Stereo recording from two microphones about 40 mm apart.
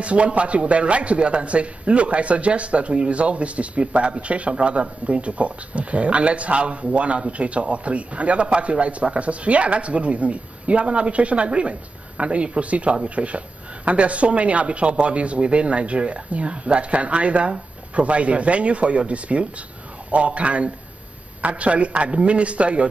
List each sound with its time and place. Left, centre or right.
0.0 s a man's voice: right